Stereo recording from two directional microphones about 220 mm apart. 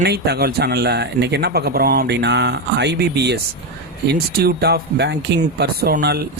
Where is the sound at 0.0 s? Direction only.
50° right (ahead or behind).